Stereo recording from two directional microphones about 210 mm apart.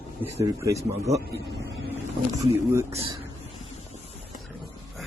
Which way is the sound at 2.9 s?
25° right (ahead or behind).